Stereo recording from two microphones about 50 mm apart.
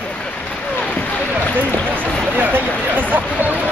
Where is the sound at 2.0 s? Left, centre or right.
Centre.